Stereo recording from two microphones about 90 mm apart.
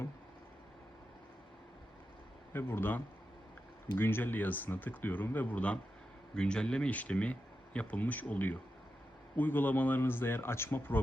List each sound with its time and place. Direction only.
2.5 s speech: 25° left (ahead or behind)